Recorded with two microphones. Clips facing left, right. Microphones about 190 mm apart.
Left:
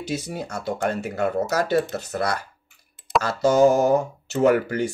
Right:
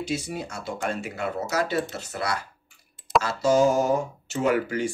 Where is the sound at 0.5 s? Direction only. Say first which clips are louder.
Left 7 dB; 50° left (ahead or behind).